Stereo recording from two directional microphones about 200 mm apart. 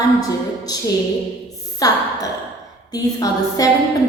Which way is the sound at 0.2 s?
20° left (ahead or behind).